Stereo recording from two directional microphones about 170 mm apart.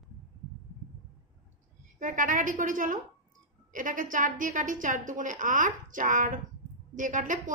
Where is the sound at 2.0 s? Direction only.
50° right (ahead or behind).